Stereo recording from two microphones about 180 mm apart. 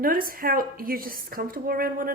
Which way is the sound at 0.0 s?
55° right (ahead or behind).